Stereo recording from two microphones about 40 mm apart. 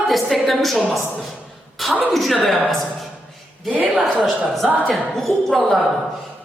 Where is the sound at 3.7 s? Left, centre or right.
Right.